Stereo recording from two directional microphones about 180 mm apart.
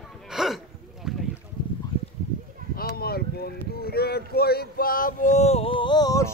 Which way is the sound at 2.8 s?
60° left (ahead or behind).